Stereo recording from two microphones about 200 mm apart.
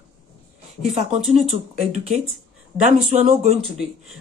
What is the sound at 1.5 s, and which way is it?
Speech, 35° right (ahead or behind).